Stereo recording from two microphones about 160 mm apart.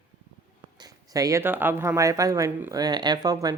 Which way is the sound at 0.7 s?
25° right (ahead or behind).